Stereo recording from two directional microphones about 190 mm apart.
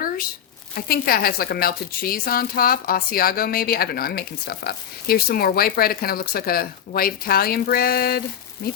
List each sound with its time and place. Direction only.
0.8 s a woman's voice: 50° left (ahead or behind)